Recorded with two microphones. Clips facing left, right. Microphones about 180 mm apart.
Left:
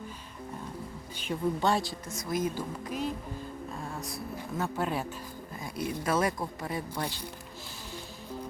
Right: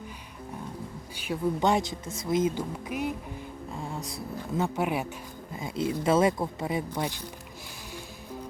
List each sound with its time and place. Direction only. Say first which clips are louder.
1.2 s speech: right 2 dB; 15° right (ahead or behind)